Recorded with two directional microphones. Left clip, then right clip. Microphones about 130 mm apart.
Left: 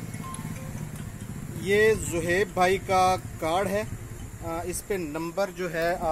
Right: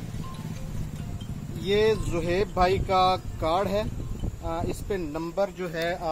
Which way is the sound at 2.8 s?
10° right (ahead or behind).